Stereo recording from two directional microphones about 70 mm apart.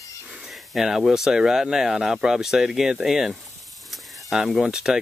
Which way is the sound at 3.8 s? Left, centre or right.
Centre.